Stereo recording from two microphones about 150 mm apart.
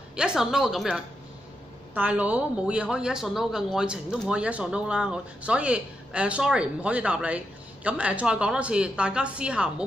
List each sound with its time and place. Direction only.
0.1 s speech: 5° right (ahead or behind)